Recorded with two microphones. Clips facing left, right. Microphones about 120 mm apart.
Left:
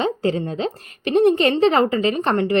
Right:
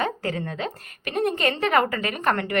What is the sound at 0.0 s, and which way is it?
A woman's voice, 25° left (ahead or behind).